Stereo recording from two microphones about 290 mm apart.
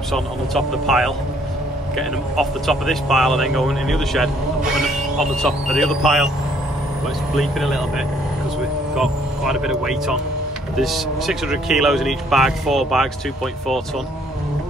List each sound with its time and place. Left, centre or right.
0.1 s speech: centre
7.3 s speech: centre
8.9 s speech: centre